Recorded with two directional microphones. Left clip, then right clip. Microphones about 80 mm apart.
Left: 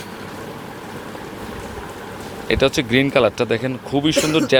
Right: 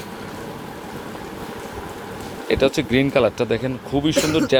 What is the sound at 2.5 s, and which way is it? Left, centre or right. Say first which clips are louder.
Speech: left 1 dB; centre.